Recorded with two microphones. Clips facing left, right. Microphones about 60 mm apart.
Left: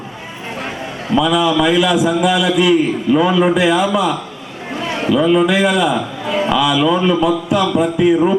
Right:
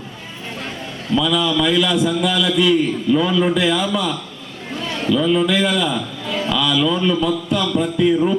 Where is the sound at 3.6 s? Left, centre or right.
Centre.